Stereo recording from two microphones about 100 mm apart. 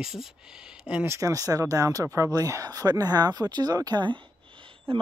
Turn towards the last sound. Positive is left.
turn(degrees=-65)  # may be behind; listen again after turning